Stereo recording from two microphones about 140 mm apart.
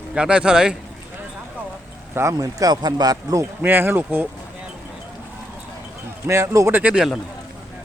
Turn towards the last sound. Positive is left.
turn(degrees=-5)  # may be behind; listen again after turning